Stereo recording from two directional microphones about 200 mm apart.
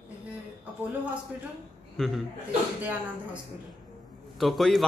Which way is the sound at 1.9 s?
Centre (ahead or behind).